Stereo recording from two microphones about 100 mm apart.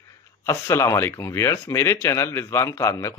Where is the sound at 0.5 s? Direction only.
25° left (ahead or behind).